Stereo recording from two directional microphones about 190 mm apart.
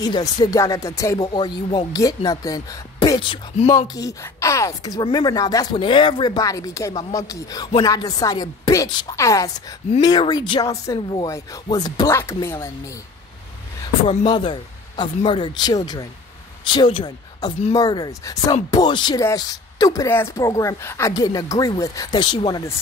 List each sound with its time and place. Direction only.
0.0 s speech: 20° left (ahead or behind)
3.7 s speech: 20° left (ahead or behind)
14.0 s speech: 25° left (ahead or behind)